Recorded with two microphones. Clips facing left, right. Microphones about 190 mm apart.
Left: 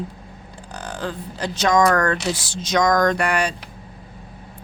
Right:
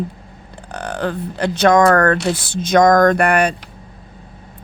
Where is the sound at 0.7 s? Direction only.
65° right (ahead or behind).